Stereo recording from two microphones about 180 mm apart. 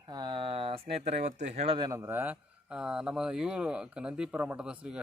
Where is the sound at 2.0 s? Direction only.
10° right (ahead or behind).